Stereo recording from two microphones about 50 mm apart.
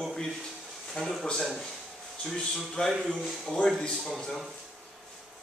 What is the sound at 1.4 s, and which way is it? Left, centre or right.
A man's voice, centre.